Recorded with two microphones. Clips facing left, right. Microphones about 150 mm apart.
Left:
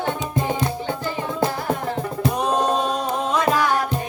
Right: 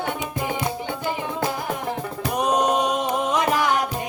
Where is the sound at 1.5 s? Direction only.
15° right (ahead or behind).